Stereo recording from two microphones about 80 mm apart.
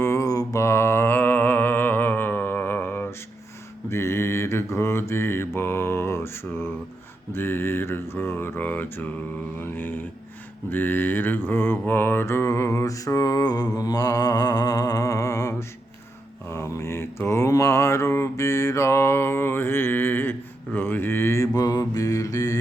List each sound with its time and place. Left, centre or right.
0.0 s mantra: left
21.5 s mantra: left